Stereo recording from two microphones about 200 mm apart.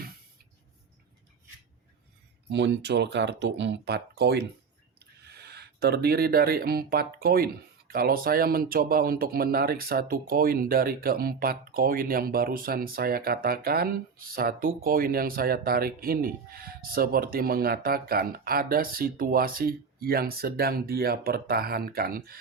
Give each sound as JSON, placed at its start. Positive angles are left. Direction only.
{"t": 2.5, "sound": "speech", "side_deg": -65}